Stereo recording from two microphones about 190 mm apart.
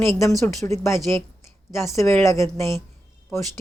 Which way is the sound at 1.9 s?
15° left (ahead or behind).